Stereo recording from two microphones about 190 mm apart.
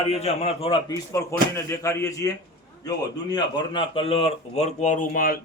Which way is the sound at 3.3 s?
25° left (ahead or behind).